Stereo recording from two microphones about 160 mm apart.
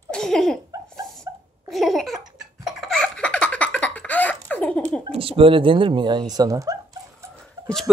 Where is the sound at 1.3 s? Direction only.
20° right (ahead or behind).